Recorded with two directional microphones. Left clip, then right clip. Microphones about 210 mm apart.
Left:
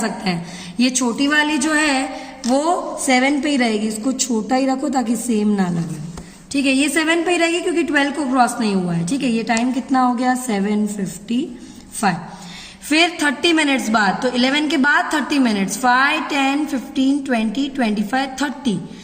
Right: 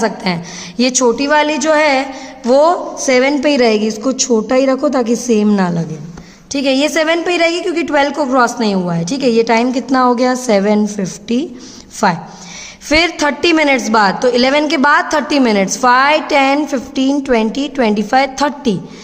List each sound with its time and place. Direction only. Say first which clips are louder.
0.8 s a woman's voice: right 6 dB; 50° right (ahead or behind)
12.0 s a woman's voice: right 6 dB; 50° right (ahead or behind)